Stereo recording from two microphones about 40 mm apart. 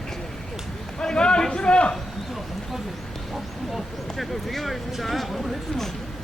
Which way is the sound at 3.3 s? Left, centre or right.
Centre.